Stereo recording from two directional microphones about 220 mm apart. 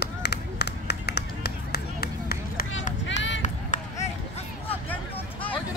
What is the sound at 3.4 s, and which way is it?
Run, 35° left (ahead or behind).